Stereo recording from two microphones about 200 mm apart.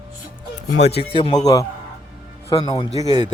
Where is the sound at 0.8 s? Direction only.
30° left (ahead or behind).